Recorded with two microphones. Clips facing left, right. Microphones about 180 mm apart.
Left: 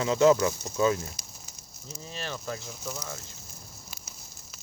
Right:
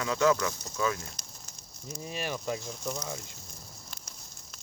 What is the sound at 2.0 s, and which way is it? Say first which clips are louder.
Speech: right 2 dB; 15° right (ahead or behind).